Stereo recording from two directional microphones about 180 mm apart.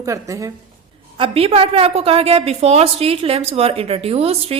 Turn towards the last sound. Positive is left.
turn(degrees=-35)  # may be behind; listen again after turning